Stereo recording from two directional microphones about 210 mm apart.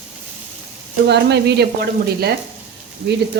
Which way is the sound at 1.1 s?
50° right (ahead or behind).